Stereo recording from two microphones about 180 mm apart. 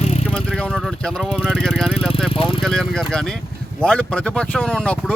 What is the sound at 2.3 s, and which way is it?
Vehicle, 30° left (ahead or behind).